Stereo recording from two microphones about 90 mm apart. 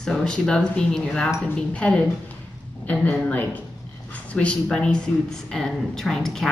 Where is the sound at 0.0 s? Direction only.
5° left (ahead or behind).